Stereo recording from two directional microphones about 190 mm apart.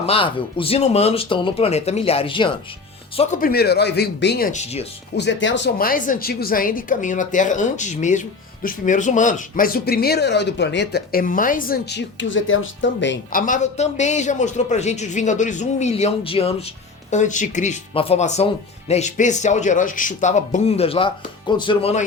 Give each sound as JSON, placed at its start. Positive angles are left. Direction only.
{"t": 0.0, "sound": "a man's voice", "side_deg": 30}
{"t": 3.4, "sound": "speech", "side_deg": 55}
{"t": 5.1, "sound": "speech", "side_deg": 65}
{"t": 13.3, "sound": "a man's voice", "side_deg": 45}